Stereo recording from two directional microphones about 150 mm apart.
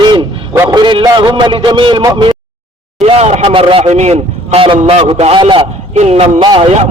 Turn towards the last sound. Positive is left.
turn(degrees=-30)  # may be behind; listen again after turning